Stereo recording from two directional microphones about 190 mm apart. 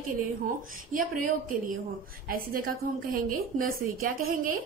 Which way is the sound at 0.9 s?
45° right (ahead or behind).